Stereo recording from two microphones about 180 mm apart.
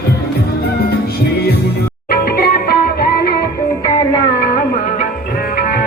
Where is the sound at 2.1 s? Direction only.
55° left (ahead or behind).